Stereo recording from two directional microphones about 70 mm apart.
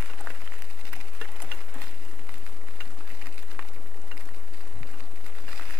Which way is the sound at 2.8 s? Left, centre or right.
Centre.